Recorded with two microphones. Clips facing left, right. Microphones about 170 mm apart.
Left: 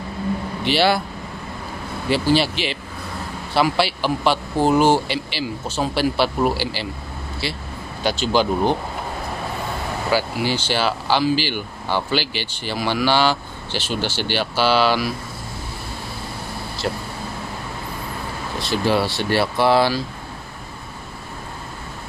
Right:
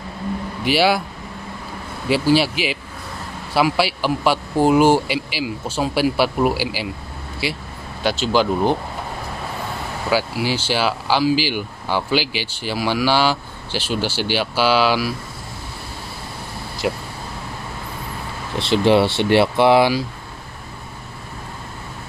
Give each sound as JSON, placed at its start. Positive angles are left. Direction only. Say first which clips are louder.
{"t": 0.7, "sound": "speech", "louder": "right 1 dB", "side_deg": -10}
{"t": 2.0, "sound": "speech", "louder": "right 2 dB", "side_deg": -5}
{"t": 10.1, "sound": "speech", "louder": "right 1 dB", "side_deg": -5}
{"t": 16.8, "sound": "speech", "louder": "right 3 dB", "side_deg": -10}
{"t": 18.7, "sound": "speech", "louder": "right 5 dB", "side_deg": -25}